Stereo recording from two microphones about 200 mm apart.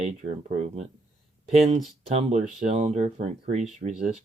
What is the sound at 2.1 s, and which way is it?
Speech, 35° right (ahead or behind).